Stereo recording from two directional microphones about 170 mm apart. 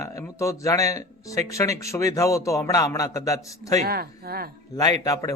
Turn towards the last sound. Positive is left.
turn(degrees=20)  # may be behind; listen again after turning